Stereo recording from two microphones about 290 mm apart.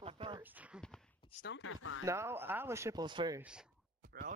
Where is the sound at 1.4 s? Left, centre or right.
Left.